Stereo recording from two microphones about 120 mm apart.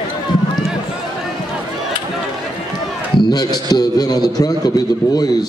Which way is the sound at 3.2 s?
35° left (ahead or behind).